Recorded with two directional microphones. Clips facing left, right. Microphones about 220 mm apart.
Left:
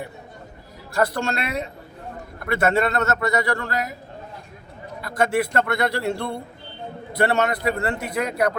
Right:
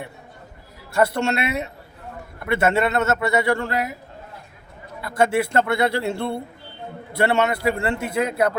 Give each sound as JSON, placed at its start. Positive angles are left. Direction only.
{"t": 0.9, "sound": "speech", "side_deg": -25}
{"t": 4.9, "sound": "speech", "side_deg": -25}